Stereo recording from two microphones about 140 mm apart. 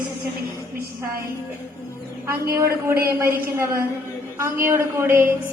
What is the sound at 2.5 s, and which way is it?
A woman's voice, 20° right (ahead or behind).